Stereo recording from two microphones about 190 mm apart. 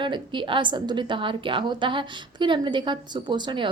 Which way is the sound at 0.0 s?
25° right (ahead or behind).